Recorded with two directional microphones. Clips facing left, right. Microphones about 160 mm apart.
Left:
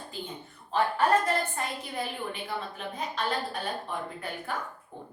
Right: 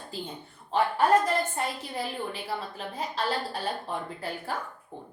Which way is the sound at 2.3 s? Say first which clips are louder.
Right 1 dB; 30° right (ahead or behind).